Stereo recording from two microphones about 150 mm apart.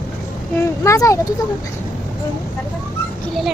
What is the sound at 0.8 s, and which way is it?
Speech, 20° left (ahead or behind).